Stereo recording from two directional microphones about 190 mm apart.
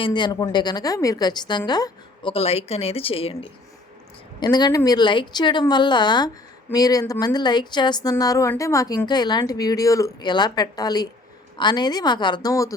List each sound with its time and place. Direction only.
0.0 s speech: 25° left (ahead or behind)